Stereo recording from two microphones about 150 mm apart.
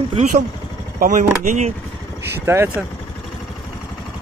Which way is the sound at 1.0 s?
60° right (ahead or behind).